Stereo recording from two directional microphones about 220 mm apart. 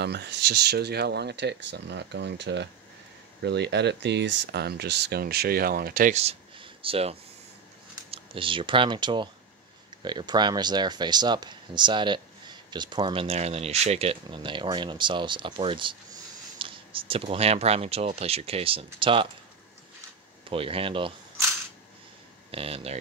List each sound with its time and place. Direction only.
0.0 s speech: 50° right (ahead or behind); by 19.2 s 25° right (ahead or behind)
20.4 s speech: 25° right (ahead or behind)
22.5 s speech: 25° right (ahead or behind)